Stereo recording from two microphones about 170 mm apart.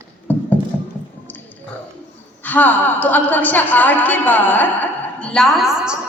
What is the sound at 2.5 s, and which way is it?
A woman's voice, 10° left (ahead or behind).